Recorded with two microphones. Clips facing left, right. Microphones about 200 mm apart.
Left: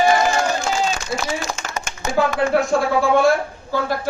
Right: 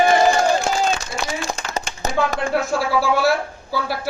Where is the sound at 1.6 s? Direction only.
35° right (ahead or behind).